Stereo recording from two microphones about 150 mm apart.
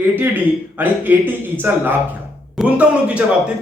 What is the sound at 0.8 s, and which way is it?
A man's voice, 15° right (ahead or behind).